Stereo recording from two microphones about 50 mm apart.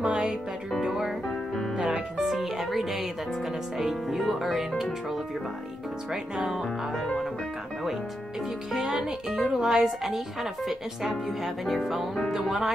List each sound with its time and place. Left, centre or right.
0.0 s music: centre
1.2 s music: centre
1.8 s music: centre
2.2 s speech: centre
6.3 s speech: centre
6.6 s speech: centre
8.7 s speech: centre